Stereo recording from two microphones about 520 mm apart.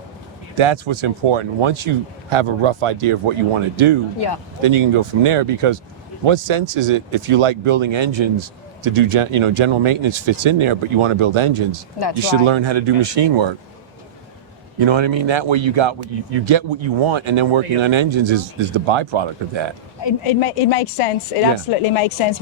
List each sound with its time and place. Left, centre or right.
0.5 s speech: right
13.2 s speech: right
14.8 s speech: right
20.0 s a woman's voice: left
21.7 s speech: left